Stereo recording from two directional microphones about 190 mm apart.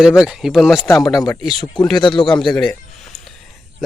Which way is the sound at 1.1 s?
20° left (ahead or behind).